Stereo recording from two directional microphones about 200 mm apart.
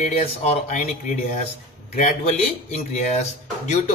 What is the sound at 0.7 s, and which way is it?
A man's voice, 40° left (ahead or behind).